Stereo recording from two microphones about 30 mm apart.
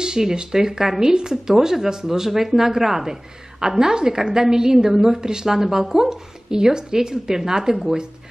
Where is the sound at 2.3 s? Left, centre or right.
Centre.